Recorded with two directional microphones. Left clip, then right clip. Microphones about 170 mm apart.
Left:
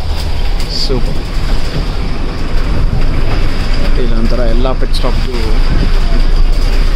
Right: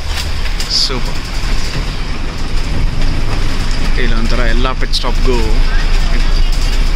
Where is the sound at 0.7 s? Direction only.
25° left (ahead or behind).